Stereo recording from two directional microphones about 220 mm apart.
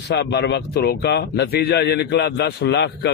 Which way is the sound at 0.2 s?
50° left (ahead or behind).